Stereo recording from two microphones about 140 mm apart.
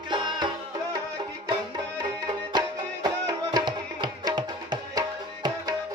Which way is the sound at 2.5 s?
30° right (ahead or behind).